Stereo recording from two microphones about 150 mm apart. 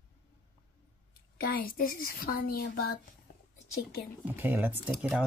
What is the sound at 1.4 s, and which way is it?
Speech, 80° left.